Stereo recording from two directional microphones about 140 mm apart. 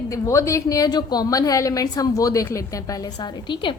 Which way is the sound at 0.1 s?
20° left (ahead or behind).